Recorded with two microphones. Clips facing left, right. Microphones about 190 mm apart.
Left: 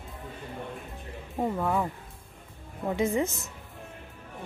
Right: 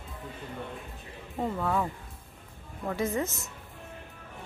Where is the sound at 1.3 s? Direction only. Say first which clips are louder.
Left 2 dB; 15° left (ahead or behind).